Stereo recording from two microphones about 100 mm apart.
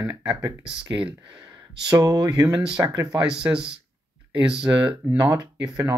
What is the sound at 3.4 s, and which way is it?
Speech, 25° right (ahead or behind).